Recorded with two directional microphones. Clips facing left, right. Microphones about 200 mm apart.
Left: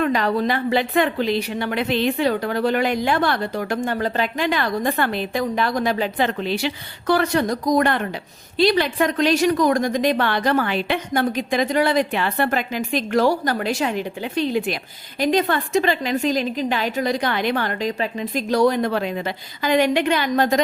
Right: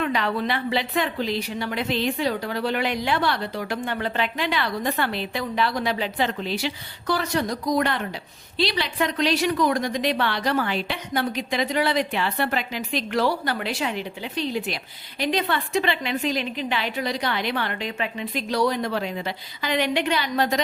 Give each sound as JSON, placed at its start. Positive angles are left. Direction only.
{"t": 0.0, "sound": "a woman's voice", "side_deg": 45}